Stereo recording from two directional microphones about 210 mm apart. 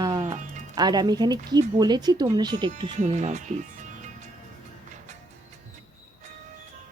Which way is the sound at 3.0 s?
35° right (ahead or behind).